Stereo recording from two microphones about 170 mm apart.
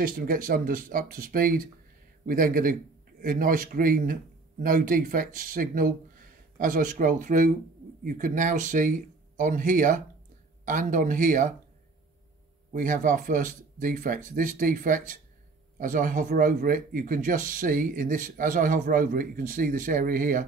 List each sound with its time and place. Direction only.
0.0 s a man's voice: 55° right (ahead or behind)
12.7 s speech: 50° right (ahead or behind)